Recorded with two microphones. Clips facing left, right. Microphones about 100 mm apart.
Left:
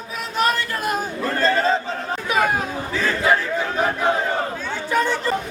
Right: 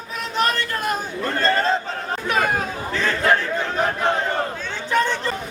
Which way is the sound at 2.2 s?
5° left (ahead or behind).